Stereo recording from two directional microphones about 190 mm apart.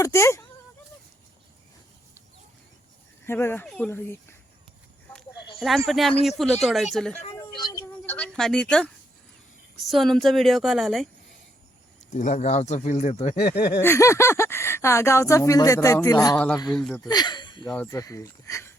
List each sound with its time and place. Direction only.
0.0 s speech: 15° left (ahead or behind)
3.2 s speech: 10° left (ahead or behind)
5.5 s a woman's voice: centre (ahead or behind)
7.3 s a sound: 20° left (ahead or behind); by 8.9 s 5° left (ahead or behind)
9.8 s a woman's voice: centre (ahead or behind)
12.1 s speech: 40° left (ahead or behind)
13.8 s speech: 15° left (ahead or behind)
16.6 s a woman's voice: centre (ahead or behind)
17.1 s speech: 20° left (ahead or behind)